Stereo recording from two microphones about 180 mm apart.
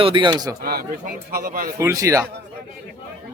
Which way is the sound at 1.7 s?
15° right (ahead or behind).